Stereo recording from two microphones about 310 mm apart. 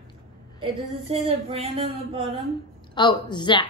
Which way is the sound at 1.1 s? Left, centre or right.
Centre.